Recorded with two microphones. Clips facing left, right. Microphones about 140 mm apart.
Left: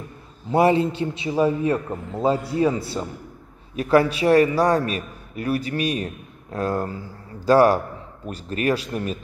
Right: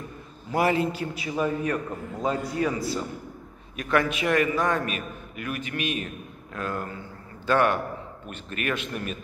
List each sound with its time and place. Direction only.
0.5 s a man's voice: 30° left (ahead or behind)